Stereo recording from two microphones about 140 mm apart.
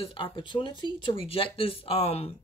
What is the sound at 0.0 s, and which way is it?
Speech, 40° left (ahead or behind).